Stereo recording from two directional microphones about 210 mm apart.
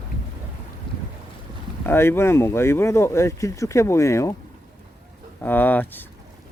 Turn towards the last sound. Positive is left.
turn(degrees=10)  # may be behind; listen again after turning